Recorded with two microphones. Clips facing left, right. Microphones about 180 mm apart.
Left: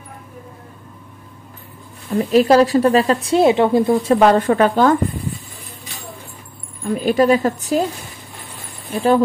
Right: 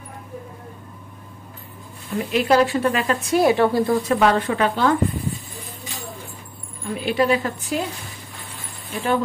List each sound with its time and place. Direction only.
2.0 s a woman's voice: 35° left (ahead or behind); by 4.1 s 20° left (ahead or behind)
4.1 s a woman's voice: 40° left (ahead or behind)
7.0 s a woman's voice: 45° left (ahead or behind)
8.9 s a woman's voice: 35° left (ahead or behind)